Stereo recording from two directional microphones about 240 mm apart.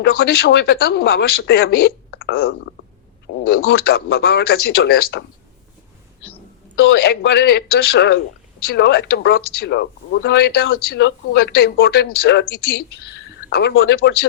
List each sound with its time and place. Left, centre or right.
0.0 s speech: left
6.7 s speech: left